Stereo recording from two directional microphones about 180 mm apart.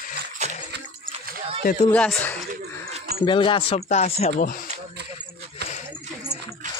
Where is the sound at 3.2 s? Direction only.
25° left (ahead or behind); by 4.6 s 45° left (ahead or behind).